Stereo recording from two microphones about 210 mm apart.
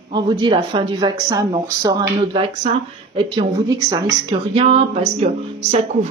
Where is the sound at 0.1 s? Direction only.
20° right (ahead or behind).